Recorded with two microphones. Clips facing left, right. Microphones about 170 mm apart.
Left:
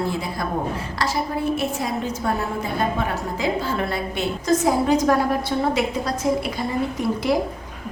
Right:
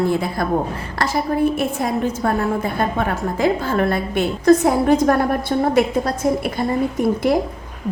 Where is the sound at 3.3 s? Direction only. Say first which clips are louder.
Right 6 dB; 50° right (ahead or behind).